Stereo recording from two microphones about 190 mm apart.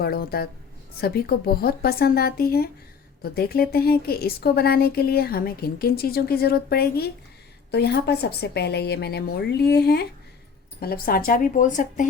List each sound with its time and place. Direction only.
0.0 s a woman's voice: 55° left (ahead or behind)